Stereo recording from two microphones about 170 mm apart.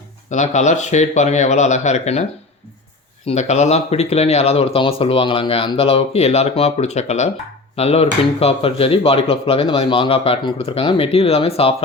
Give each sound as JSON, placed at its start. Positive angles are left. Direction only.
{"t": 0.3, "sound": "speech", "side_deg": 45}
{"t": 3.2, "sound": "speech", "side_deg": 40}